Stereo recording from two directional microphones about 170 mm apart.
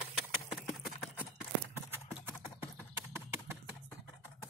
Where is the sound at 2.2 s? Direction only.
15° right (ahead or behind).